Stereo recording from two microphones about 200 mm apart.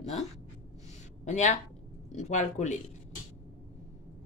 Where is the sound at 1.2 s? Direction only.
35° left (ahead or behind).